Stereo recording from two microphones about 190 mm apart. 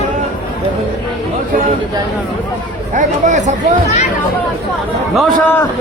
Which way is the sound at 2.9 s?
40° right (ahead or behind).